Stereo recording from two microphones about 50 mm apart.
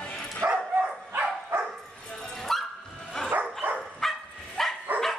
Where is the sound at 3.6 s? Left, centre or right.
Right.